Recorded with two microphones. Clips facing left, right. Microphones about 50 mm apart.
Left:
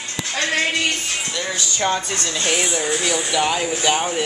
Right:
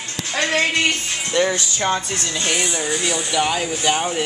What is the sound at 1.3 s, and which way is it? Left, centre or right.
Speech, right.